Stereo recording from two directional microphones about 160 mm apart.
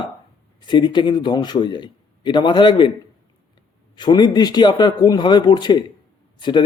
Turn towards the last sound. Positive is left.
turn(degrees=30)  # may be behind; listen again after turning